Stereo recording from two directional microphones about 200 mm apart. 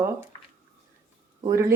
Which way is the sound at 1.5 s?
15° right (ahead or behind).